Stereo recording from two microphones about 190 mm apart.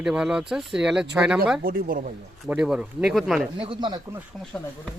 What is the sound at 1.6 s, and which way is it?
Speech, 50° right (ahead or behind).